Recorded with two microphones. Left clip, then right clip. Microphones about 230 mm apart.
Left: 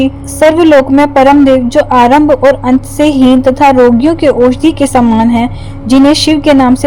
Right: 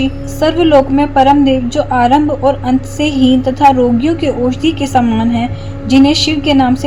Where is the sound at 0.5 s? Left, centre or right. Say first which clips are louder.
Even; left.